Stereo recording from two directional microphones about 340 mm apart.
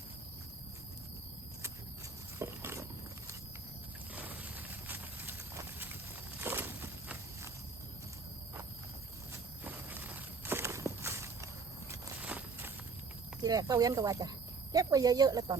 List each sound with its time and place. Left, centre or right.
2.4 s walk: centre
4.1 s clip-clop: centre
6.4 s walk: centre
9.6 s walk: centre
13.4 s speech: centre